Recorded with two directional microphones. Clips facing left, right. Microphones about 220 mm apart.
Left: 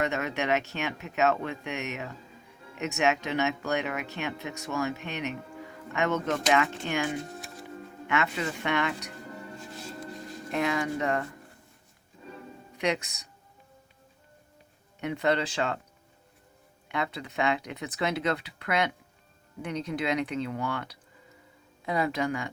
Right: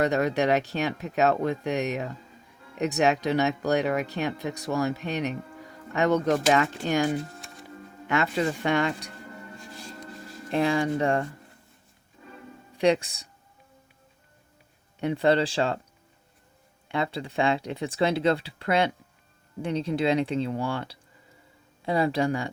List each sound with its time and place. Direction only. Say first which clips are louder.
0.0 s speech: right 6 dB; 35° right (ahead or behind)
7.3 s music: left 4 dB; centre (ahead or behind)
8.0 s speech: right 4 dB; 35° right (ahead or behind)
10.5 s speech: right 4 dB; 30° right (ahead or behind)
12.7 s speech: right 7 dB; 30° right (ahead or behind)
15.0 s speech: right 5 dB; 30° right (ahead or behind)
16.9 s speech: right 4 dB; 30° right (ahead or behind)